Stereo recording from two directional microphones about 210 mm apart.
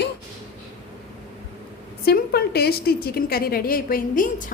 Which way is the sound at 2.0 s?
50° left (ahead or behind).